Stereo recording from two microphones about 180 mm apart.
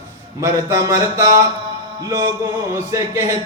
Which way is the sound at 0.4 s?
15° right (ahead or behind).